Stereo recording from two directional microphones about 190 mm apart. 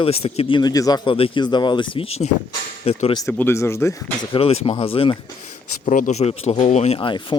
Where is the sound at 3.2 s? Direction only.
15° left (ahead or behind); by 5.1 s 30° left (ahead or behind).